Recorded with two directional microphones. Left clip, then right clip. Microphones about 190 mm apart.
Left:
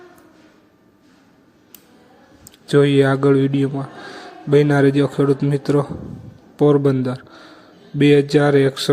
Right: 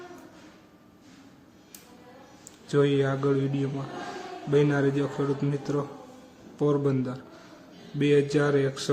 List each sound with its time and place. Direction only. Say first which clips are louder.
2.6 s speech: left 10 dB; 40° left (ahead or behind)